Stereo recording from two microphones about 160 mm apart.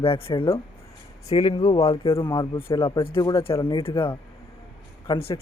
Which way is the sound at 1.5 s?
25° left (ahead or behind).